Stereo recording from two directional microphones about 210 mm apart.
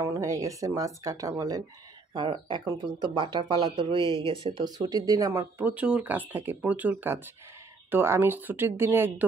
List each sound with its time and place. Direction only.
0.0 s speech: 15° right (ahead or behind)